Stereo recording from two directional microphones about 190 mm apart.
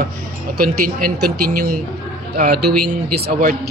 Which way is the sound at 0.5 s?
50° right (ahead or behind).